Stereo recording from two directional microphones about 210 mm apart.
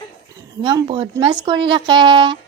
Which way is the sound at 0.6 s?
25° right (ahead or behind).